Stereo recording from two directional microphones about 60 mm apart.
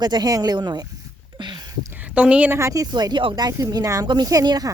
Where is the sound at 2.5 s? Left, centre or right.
Right.